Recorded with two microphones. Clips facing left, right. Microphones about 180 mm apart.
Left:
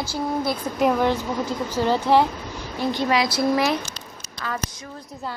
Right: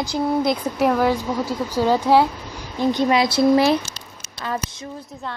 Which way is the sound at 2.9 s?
20° right (ahead or behind).